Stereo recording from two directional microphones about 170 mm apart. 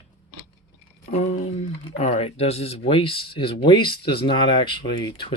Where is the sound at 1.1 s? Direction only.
40° left (ahead or behind).